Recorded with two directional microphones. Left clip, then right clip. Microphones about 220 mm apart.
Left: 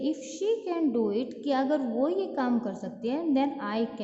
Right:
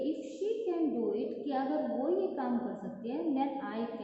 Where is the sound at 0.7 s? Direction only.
55° left (ahead or behind).